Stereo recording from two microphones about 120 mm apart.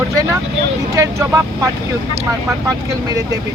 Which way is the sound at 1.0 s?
25° right (ahead or behind).